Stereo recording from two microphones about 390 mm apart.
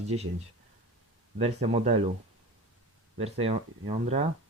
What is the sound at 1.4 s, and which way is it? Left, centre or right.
Speech, centre.